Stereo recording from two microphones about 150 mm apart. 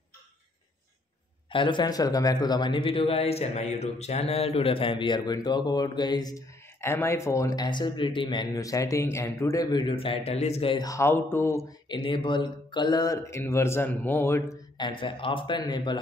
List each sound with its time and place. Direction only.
1.5 s a man's voice: 35° left (ahead or behind)
6.8 s speech: 15° left (ahead or behind); by 10.8 s 40° left (ahead or behind)
10.8 s speech: 20° left (ahead or behind)
11.9 s speech: 35° left (ahead or behind); by 14.6 s 15° left (ahead or behind)
14.8 s a man's voice: 35° left (ahead or behind)